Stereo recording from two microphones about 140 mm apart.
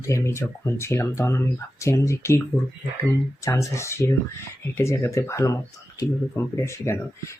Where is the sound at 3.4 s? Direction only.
20° left (ahead or behind).